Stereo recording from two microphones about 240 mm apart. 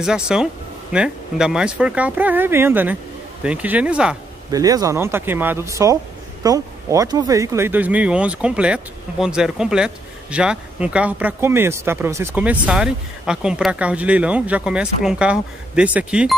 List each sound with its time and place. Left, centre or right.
0.0 s speech: centre
4.5 s speech: centre